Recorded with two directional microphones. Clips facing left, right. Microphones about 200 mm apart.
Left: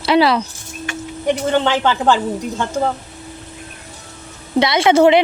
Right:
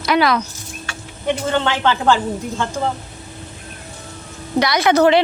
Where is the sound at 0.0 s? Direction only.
30° left (ahead or behind).